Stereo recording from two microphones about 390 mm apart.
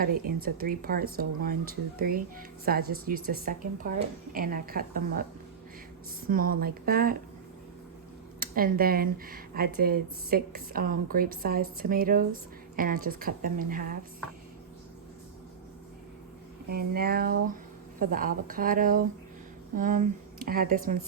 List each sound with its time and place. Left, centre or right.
0.0 s speech: right
6.2 s speech: right
8.4 s speech: right
16.6 s speech: right